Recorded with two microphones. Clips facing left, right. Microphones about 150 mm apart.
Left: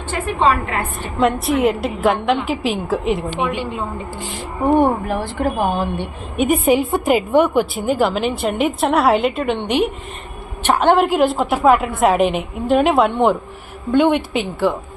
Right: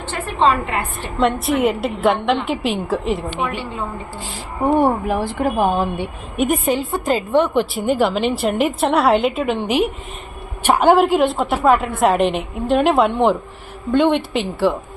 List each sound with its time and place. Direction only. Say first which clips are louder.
1.2 s a woman's voice: left 1 dB; centre (ahead or behind)
3.4 s a woman's voice: left 3 dB; 15° left (ahead or behind)
4.8 s a woman's voice: even; 10° right (ahead or behind)
6.7 s a woman's voice: left 4 dB; 15° left (ahead or behind); by 14.8 s centre (ahead or behind)